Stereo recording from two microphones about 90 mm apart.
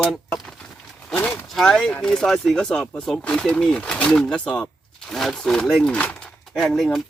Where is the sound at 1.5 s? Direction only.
5° left (ahead or behind).